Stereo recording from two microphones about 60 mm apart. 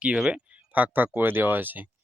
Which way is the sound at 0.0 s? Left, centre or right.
Centre.